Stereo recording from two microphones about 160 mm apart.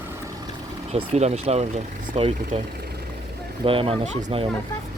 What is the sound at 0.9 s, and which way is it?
Speech, 40° right (ahead or behind).